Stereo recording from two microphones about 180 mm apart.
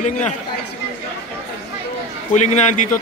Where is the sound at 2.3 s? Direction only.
40° left (ahead or behind).